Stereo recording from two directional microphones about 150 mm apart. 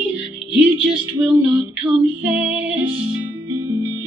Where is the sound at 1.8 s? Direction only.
30° right (ahead or behind).